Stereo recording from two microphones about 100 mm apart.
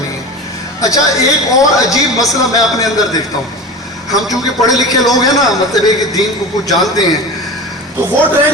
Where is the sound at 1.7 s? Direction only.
35° left (ahead or behind).